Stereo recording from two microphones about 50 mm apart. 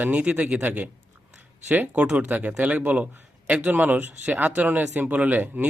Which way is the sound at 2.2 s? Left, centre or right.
Right.